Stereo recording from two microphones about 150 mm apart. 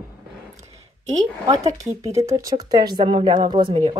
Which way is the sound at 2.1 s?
20° right (ahead or behind).